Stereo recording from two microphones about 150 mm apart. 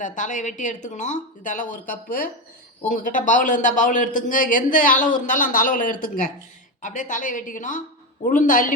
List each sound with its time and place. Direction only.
0.0 s a man's voice: 55° left (ahead or behind)